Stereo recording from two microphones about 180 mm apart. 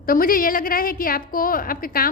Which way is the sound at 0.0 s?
55° left (ahead or behind).